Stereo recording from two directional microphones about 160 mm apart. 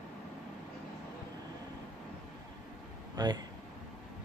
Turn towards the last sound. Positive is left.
turn(degrees=-25)  # may be behind; listen again after turning